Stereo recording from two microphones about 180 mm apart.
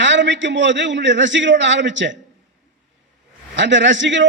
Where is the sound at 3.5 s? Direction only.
85° right.